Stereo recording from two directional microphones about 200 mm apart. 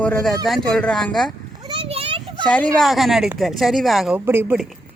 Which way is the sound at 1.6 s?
25° right (ahead or behind).